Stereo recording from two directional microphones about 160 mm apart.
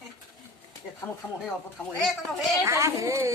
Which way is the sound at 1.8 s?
Centre (ahead or behind).